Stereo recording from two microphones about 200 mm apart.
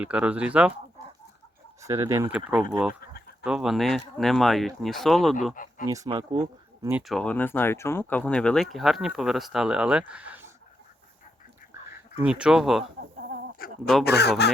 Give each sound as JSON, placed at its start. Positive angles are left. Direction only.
{"t": 0.0, "sound": "speech", "side_deg": -5}
{"t": 1.8, "sound": "speech", "side_deg": -15}
{"t": 5.8, "sound": "speech", "side_deg": -15}
{"t": 6.9, "sound": "speech", "side_deg": 0}
{"t": 12.2, "sound": "speech", "side_deg": -5}
{"t": 13.0, "sound": "chicken", "side_deg": -50}
{"t": 13.6, "sound": "a sound", "side_deg": 45}
{"t": 14.0, "sound": "speech", "side_deg": 55}